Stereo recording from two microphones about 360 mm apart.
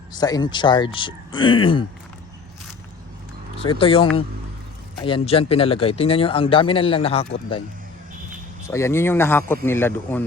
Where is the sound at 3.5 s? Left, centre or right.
Centre.